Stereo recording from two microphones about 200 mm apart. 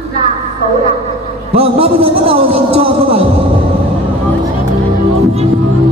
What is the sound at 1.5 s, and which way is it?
A man's voice, 30° right (ahead or behind).